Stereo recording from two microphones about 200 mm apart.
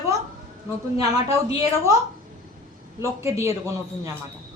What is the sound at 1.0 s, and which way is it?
Speech, 30° left (ahead or behind).